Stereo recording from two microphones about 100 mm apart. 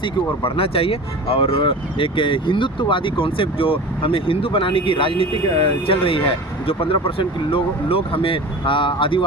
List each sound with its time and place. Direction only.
0.0 s speech: 65° left (ahead or behind)